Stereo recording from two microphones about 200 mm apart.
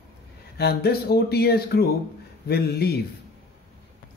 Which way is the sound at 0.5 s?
50° left (ahead or behind).